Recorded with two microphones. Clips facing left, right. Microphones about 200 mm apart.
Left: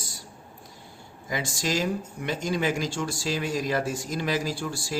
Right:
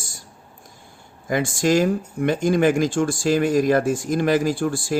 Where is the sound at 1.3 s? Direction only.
55° right (ahead or behind).